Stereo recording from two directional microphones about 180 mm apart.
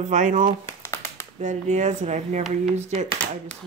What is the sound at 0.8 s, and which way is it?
Clapping, 15° left (ahead or behind).